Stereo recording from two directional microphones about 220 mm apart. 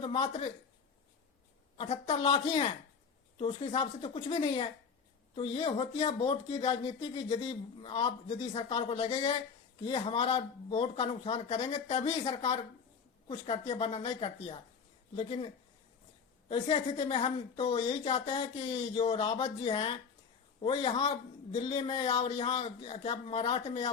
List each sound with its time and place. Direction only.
0.0 s speech: 25° left (ahead or behind)
1.8 s a woman's voice: 25° left (ahead or behind)